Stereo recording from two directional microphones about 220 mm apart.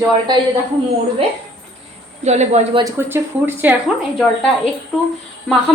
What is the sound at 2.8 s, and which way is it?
Speech, 10° right (ahead or behind).